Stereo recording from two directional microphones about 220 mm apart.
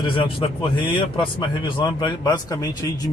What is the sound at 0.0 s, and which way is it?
A man's voice, 20° left (ahead or behind).